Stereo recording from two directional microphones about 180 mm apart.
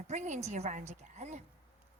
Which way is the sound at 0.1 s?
40° right (ahead or behind).